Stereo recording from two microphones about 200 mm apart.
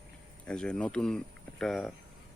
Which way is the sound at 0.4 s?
5° left (ahead or behind).